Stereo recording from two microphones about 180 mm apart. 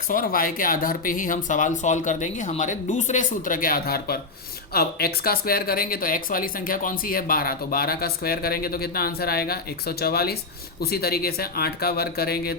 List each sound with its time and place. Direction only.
0.1 s speech: 50° left (ahead or behind)